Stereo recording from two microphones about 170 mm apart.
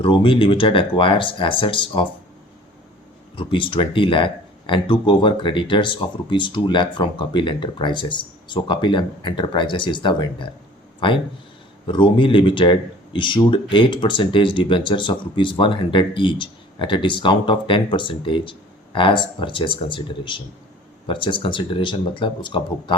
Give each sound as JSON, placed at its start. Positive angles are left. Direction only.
{"t": 0.0, "sound": "speech", "side_deg": 30}
{"t": 3.3, "sound": "speech", "side_deg": 30}
{"t": 11.9, "sound": "speech", "side_deg": 30}